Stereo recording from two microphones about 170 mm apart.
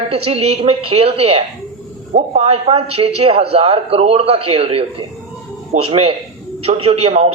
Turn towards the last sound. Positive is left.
turn(degrees=-35)  # may be behind; listen again after turning